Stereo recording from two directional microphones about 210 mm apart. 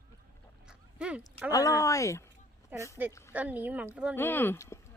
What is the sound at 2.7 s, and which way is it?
Speech, 10° right (ahead or behind).